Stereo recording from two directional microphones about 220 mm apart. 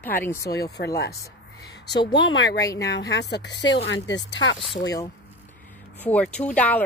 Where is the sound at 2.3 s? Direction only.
55° left (ahead or behind).